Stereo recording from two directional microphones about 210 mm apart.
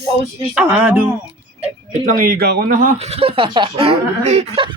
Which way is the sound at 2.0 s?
40° right (ahead or behind).